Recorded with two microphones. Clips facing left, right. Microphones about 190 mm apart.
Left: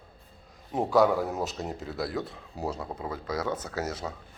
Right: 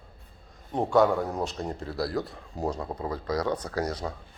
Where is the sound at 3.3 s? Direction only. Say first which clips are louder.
Right 3 dB; 5° left (ahead or behind).